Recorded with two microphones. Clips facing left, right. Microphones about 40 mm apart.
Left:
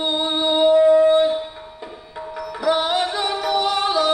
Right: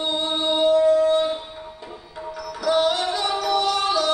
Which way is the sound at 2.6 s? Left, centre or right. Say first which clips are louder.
Left 1 dB; left.